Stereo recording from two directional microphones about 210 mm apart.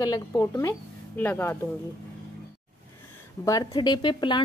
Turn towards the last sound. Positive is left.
turn(degrees=20)  # may be behind; listen again after turning